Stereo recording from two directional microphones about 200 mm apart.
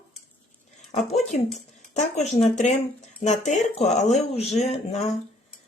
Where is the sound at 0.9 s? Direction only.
35° left (ahead or behind).